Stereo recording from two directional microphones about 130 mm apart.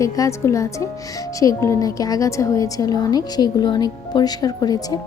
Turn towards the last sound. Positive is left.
turn(degrees=30)  # may be behind; listen again after turning